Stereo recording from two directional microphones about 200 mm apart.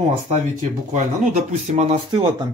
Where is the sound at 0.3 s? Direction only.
35° right (ahead or behind).